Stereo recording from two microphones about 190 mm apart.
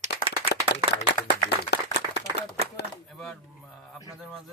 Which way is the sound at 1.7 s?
65° left (ahead or behind).